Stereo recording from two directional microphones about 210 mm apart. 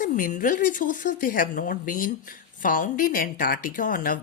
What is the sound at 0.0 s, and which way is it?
Speech, 40° left (ahead or behind).